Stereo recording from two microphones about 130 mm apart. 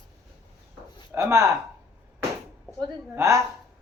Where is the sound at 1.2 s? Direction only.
25° right (ahead or behind).